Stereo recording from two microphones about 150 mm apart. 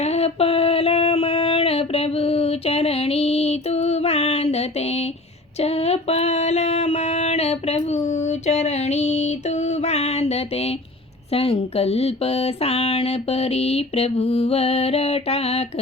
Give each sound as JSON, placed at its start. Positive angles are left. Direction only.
{"t": 0.0, "sound": "a sound", "side_deg": 45}
{"t": 5.5, "sound": "female singing", "side_deg": 45}
{"t": 11.3, "sound": "speech", "side_deg": 40}